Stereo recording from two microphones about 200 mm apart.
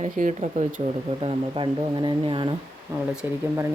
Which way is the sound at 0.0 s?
35° right (ahead or behind).